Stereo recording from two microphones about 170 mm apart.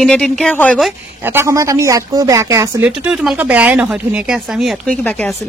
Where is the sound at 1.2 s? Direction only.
15° right (ahead or behind).